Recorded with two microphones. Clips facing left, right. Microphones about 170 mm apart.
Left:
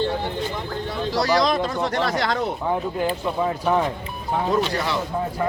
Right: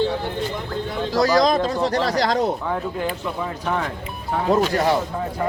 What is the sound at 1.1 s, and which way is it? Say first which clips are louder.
Speech: right 3 dB; 45° right (ahead or behind).